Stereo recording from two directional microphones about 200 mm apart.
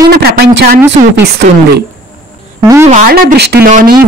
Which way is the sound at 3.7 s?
40° right (ahead or behind).